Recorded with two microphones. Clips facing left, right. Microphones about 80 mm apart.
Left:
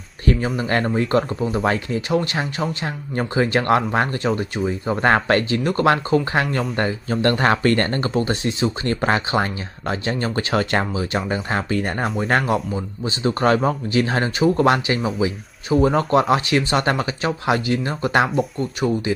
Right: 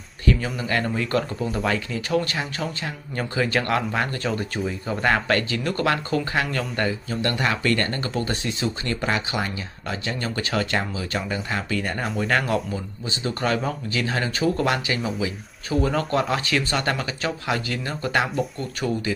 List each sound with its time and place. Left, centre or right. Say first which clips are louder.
0.6 s speech: left 5 dB; left
2.0 s speech: left 3 dB; left
4.6 s speech: left 5 dB; left
6.3 s speech: left 4 dB; left
13.3 s speech: left 7 dB; left
18.3 s speech: left 5 dB; centre